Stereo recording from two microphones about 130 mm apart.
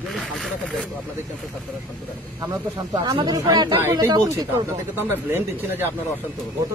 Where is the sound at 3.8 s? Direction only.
20° right (ahead or behind).